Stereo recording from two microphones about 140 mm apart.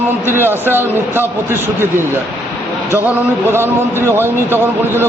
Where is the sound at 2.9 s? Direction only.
15° right (ahead or behind).